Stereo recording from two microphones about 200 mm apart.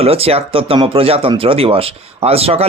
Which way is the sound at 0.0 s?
30° right (ahead or behind).